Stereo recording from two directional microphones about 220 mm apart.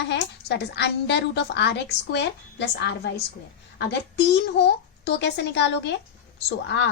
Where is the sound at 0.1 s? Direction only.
50° left (ahead or behind).